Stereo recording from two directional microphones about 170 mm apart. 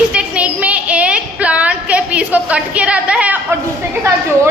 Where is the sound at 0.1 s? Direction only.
5° right (ahead or behind).